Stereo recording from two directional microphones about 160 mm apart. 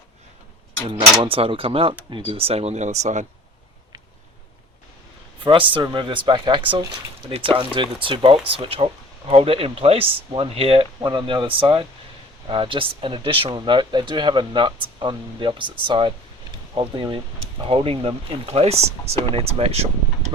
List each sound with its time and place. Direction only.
1.2 s speech: 35° right (ahead or behind)
5.4 s speech: 35° right (ahead or behind)